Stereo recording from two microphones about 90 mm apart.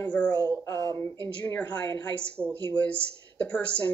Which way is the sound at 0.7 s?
35° left (ahead or behind).